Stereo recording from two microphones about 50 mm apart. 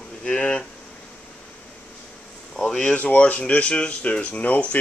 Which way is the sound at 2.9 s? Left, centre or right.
Left.